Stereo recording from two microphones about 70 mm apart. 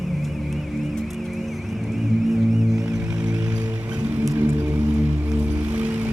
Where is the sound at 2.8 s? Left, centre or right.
Centre.